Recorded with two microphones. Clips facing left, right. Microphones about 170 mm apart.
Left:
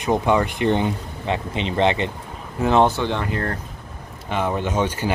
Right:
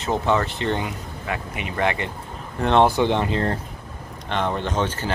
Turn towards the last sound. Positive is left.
turn(degrees=10)  # may be behind; listen again after turning